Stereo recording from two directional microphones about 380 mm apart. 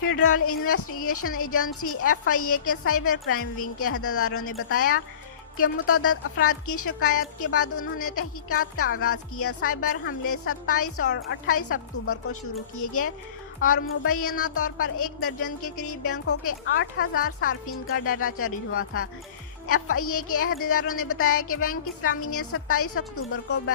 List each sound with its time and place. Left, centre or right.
0.0 s a woman's voice: left
4.8 s speech: left
5.5 s a woman's voice: left